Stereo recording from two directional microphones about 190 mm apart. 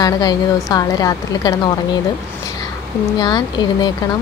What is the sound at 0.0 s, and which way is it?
Speech, 20° left (ahead or behind).